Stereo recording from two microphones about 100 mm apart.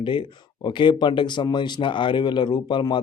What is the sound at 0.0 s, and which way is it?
Speech, 55° left (ahead or behind).